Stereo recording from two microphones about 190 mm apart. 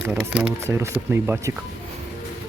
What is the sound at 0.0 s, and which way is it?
Speech, 5° right (ahead or behind).